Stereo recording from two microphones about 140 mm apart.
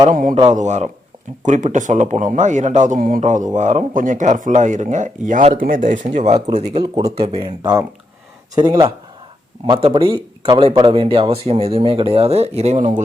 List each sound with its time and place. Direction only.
0.1 s a man's voice: 75° right (ahead or behind)
0.3 s speech: 55° right (ahead or behind)
5.5 s speech: 80° right; by 6.6 s 50° right (ahead or behind)
6.7 s speech: 30° right (ahead or behind)
7.2 s speech: 45° right (ahead or behind)
7.6 s speech: 25° right (ahead or behind)
9.6 s speech: 40° right (ahead or behind)